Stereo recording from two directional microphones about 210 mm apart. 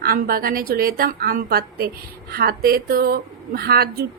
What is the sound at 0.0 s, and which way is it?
A woman's voice, 45° right (ahead or behind).